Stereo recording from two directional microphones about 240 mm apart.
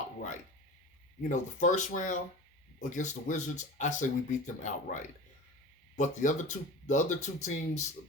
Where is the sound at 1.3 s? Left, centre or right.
Left.